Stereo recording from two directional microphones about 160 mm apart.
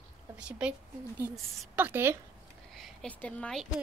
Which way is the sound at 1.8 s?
15° right (ahead or behind).